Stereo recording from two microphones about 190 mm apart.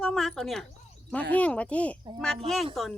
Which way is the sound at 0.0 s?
5° left (ahead or behind).